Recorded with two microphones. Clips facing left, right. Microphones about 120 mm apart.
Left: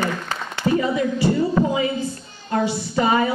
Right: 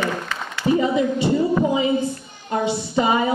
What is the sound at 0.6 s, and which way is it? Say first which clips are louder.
A woman's voice: right 2 dB; 20° right (ahead or behind).